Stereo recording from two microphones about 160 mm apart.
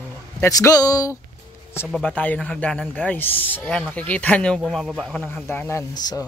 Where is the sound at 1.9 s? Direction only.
10° left (ahead or behind).